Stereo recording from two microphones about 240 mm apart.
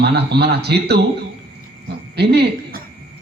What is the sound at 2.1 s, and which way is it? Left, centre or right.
Speech, right.